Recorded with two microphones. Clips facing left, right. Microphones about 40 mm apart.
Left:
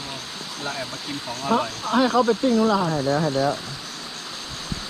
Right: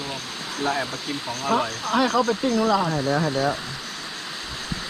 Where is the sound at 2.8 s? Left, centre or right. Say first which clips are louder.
Left 1 dB; centre.